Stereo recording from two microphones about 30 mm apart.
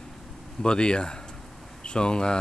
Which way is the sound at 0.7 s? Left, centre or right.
Left.